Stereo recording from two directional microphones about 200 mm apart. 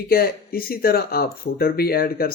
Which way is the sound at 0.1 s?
50° left (ahead or behind).